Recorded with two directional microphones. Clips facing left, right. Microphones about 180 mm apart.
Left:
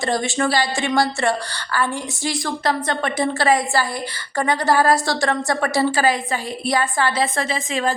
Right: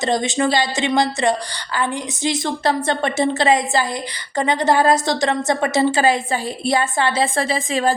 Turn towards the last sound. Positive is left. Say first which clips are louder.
# right 3 dB
turn(degrees=-35)  # may be behind; listen again after turning